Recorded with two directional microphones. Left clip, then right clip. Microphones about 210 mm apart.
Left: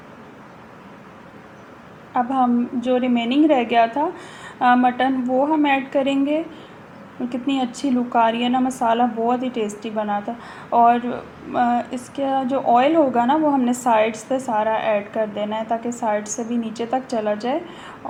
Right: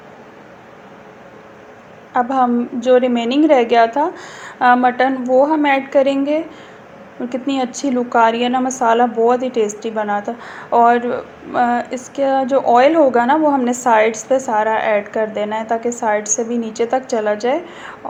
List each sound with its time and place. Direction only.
2.1 s a woman's voice: 25° right (ahead or behind)